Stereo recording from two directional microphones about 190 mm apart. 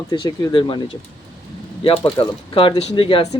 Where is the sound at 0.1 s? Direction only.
20° left (ahead or behind).